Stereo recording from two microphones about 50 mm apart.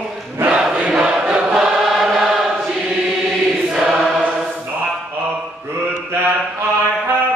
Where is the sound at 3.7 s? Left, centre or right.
Centre.